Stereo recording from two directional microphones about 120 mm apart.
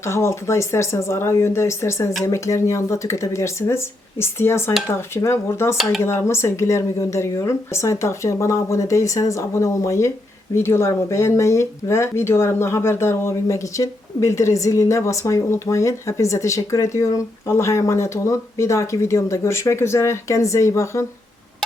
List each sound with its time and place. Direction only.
0.0 s speech: 25° left (ahead or behind)
5.7 s speech: centre (ahead or behind)
6.0 s speech: 20° left (ahead or behind)